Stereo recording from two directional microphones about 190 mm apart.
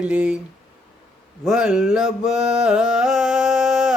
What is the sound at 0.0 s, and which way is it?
Speech, 5° right (ahead or behind).